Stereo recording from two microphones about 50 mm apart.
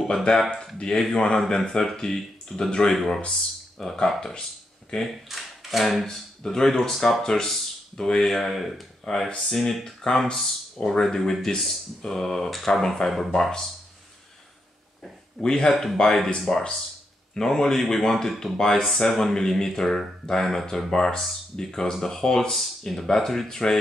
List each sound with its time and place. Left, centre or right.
0.1 s speech: centre
5.0 s speech: centre
15.4 s speech: centre
15.7 s speech: centre